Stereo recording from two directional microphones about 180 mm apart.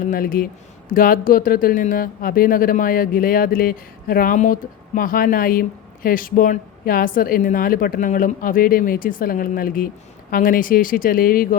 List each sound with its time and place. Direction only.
0.0 s speech: 50° left (ahead or behind)